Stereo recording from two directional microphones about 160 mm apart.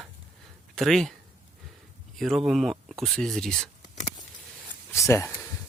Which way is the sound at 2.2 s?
Centre (ahead or behind).